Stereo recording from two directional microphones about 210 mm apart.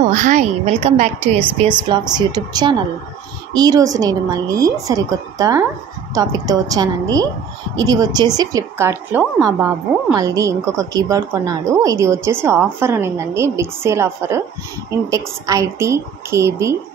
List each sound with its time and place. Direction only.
0.1 s a woman's voice: 35° right (ahead or behind)
1.9 s a woman's voice: 20° right (ahead or behind)